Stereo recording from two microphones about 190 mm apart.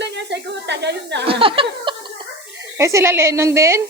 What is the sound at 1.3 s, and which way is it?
Speech, 30° right (ahead or behind).